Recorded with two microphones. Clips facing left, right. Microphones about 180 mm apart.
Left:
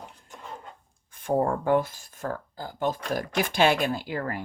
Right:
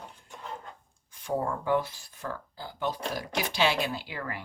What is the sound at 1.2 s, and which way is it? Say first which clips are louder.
Speech: left 6 dB; 50° left (ahead or behind).